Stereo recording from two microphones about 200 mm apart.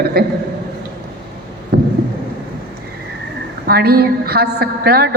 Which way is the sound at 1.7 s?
55° right (ahead or behind).